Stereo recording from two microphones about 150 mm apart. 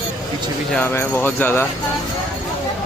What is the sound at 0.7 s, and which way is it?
Speech, 15° left (ahead or behind).